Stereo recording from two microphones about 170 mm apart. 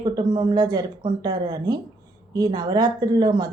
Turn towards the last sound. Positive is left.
turn(degrees=-25)  # may be behind; listen again after turning